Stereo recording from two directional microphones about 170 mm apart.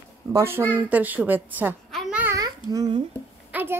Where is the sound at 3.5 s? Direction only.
10° right (ahead or behind).